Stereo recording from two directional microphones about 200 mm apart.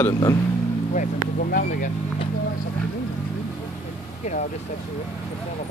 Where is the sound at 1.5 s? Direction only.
40° left (ahead or behind).